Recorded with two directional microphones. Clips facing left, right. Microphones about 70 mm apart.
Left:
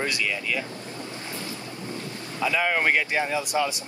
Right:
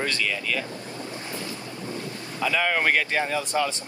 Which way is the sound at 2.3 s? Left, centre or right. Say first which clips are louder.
Even; centre.